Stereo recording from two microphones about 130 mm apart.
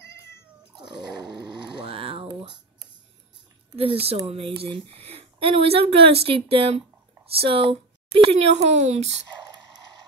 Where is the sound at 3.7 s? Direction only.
45° right (ahead or behind).